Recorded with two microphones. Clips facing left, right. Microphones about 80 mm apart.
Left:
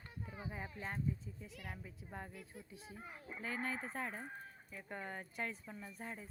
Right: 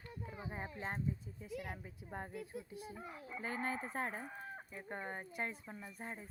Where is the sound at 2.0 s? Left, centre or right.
Right.